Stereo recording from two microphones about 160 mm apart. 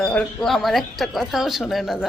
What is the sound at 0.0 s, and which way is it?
A woman's voice, 5° left (ahead or behind).